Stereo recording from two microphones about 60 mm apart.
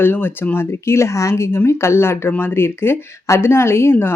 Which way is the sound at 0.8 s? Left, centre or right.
Left.